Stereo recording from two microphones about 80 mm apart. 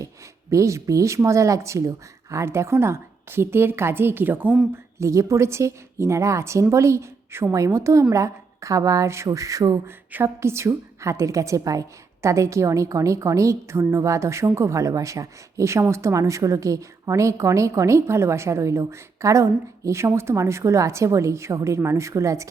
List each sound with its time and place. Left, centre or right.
0.5 s a woman's voice: right
4.7 s a woman's voice: right